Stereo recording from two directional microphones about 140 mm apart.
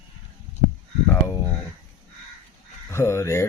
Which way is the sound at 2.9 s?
20° left (ahead or behind).